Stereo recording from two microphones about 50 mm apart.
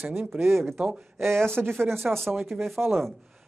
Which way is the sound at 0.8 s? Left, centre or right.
Right.